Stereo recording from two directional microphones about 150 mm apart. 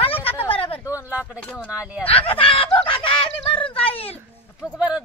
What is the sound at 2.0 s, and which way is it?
Speech, 40° left (ahead or behind).